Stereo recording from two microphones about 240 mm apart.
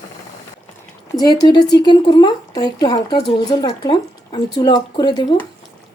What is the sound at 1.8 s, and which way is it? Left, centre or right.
Speech, centre.